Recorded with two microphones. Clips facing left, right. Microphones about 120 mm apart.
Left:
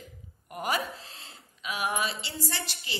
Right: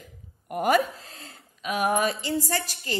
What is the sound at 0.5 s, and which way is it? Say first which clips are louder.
A woman's voice: right 8 dB; 50° right (ahead or behind).